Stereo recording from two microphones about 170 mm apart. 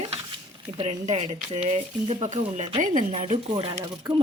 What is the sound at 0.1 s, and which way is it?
Speech, 30° right (ahead or behind).